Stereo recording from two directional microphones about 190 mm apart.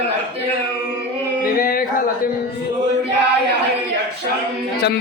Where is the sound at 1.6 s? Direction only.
50° left (ahead or behind).